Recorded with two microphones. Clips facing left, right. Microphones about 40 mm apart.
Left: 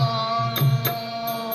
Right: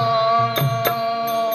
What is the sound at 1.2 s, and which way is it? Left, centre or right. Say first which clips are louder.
Music: right 6 dB; right.